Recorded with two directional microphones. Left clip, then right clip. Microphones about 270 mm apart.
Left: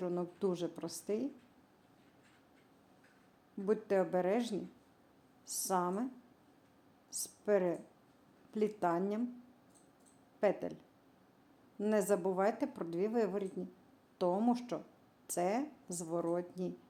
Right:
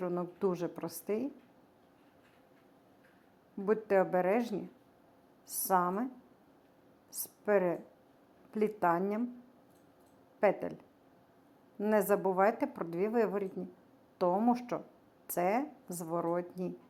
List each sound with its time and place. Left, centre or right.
0.0 s speech: centre
3.7 s speech: centre
7.1 s speech: centre
10.4 s speech: centre
11.8 s speech: centre